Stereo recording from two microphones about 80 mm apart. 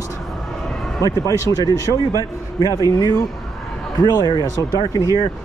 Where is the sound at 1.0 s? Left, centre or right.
Left.